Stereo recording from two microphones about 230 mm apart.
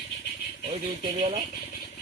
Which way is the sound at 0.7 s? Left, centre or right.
Right.